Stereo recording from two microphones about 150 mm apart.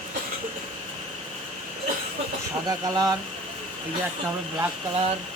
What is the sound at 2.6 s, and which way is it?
Speech, 25° right (ahead or behind).